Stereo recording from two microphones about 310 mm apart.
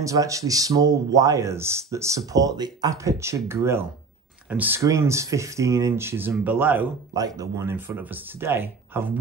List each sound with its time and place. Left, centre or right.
0.0 s speech: centre